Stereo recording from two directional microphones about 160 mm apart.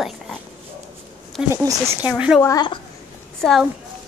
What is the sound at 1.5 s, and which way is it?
Speech, 20° right (ahead or behind).